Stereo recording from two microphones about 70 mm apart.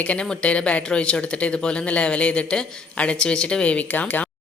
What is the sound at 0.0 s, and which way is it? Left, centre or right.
Speech, centre.